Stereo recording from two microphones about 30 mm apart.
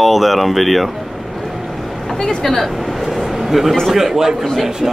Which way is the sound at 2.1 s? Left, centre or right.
Centre.